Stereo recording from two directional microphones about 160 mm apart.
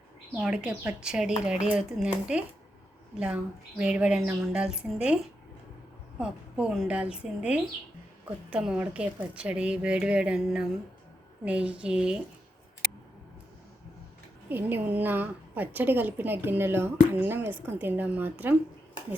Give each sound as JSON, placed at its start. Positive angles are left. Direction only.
{"t": 0.3, "sound": "a woman's voice", "side_deg": -5}
{"t": 4.2, "sound": "a woman's voice", "side_deg": -15}
{"t": 4.5, "sound": "a woman's voice", "side_deg": -5}
{"t": 14.5, "sound": "a woman's voice", "side_deg": -10}